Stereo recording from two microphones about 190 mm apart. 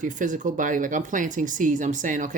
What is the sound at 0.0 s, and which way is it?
Speech, 40° right (ahead or behind).